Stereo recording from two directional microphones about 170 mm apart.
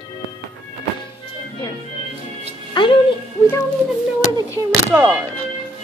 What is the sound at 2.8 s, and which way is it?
Speech, 25° left (ahead or behind).